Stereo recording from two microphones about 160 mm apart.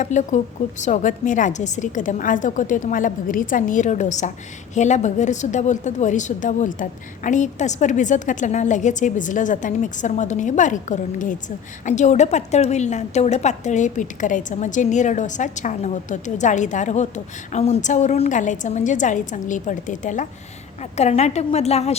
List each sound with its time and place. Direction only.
0.0 s a woman's voice: 50° left (ahead or behind)